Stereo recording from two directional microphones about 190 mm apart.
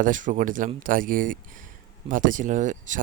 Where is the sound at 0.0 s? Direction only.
45° right (ahead or behind).